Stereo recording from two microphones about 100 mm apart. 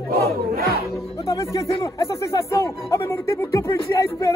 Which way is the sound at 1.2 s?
35° left (ahead or behind).